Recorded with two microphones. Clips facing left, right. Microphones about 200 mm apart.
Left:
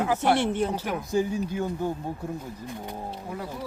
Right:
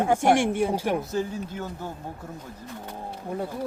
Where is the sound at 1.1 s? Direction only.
10° left (ahead or behind).